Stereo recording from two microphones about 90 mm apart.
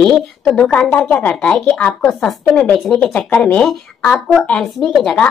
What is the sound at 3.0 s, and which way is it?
A woman's voice, 15° left (ahead or behind).